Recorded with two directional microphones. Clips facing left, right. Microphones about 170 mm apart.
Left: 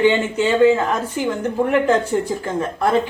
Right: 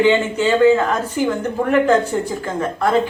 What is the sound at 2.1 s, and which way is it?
Speech, 20° left (ahead or behind).